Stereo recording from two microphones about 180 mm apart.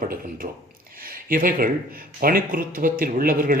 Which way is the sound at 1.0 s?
50° right (ahead or behind).